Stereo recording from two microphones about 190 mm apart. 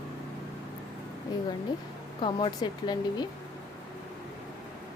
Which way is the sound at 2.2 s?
25° left (ahead or behind).